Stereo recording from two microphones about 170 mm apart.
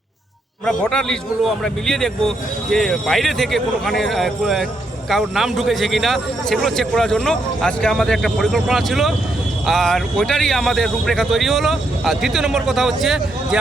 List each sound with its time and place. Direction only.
0.6 s a man's voice: 5° left (ahead or behind)